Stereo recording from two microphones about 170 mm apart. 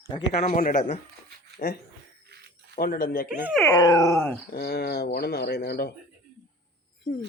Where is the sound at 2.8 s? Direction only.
55° left (ahead or behind).